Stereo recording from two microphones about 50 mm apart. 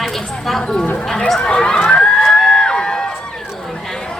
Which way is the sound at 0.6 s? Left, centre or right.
Centre.